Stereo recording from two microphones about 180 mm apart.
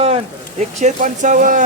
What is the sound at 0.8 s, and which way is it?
Speech, 45° right (ahead or behind).